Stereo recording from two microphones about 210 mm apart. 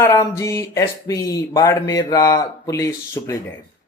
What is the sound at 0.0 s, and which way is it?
Speech, 15° left (ahead or behind).